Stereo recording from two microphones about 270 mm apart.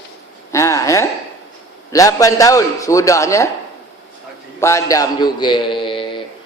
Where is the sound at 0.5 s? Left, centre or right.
Centre.